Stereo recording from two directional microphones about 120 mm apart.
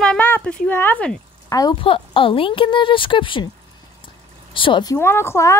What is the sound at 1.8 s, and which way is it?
A woman's voice, 45° left (ahead or behind).